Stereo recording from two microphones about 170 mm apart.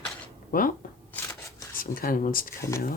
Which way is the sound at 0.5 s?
60° left (ahead or behind).